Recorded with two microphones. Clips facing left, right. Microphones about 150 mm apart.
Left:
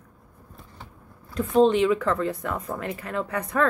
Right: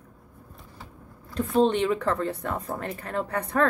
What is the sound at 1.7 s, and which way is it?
Speech, 35° right (ahead or behind).